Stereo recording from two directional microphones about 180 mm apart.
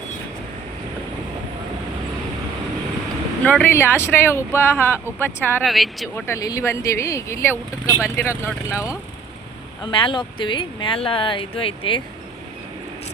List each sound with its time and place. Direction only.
3.4 s speech: 10° left (ahead or behind)
5.6 s speech: centre (ahead or behind)
6.1 s speech: 15° left (ahead or behind)
9.8 s speech: 30° left (ahead or behind)